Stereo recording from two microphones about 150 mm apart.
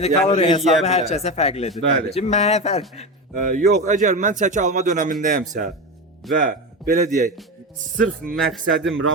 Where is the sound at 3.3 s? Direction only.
55° right (ahead or behind).